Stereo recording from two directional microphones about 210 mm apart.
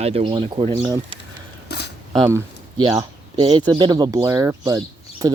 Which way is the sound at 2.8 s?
20° right (ahead or behind).